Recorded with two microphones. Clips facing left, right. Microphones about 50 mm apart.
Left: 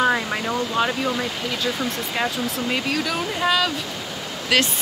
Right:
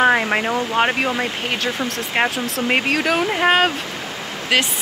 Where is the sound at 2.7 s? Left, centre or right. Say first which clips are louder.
Right 8 dB; right.